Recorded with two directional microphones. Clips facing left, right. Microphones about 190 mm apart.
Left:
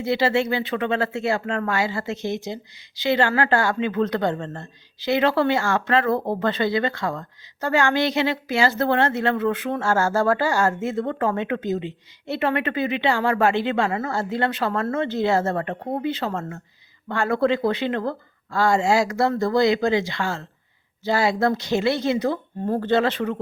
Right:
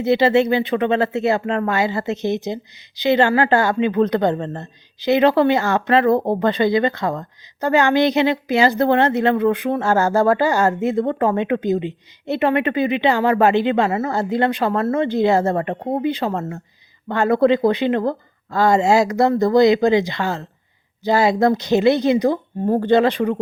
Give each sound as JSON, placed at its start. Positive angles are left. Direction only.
{"t": 0.0, "sound": "a woman's voice", "side_deg": -20}